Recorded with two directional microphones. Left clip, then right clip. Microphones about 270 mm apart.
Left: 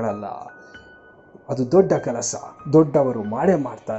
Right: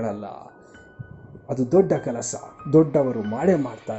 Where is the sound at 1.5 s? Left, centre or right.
Centre.